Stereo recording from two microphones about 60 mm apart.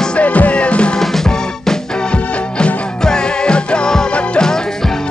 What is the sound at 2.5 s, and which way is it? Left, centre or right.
Music, centre.